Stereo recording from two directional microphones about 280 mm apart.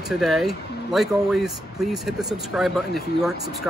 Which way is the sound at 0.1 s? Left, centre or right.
Centre.